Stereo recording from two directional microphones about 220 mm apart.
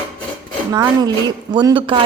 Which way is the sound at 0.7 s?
15° right (ahead or behind).